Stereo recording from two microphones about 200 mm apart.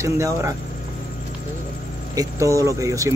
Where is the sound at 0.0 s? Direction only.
15° right (ahead or behind).